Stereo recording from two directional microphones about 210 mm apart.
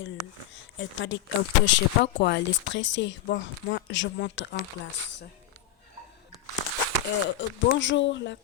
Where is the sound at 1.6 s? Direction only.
50° left (ahead or behind).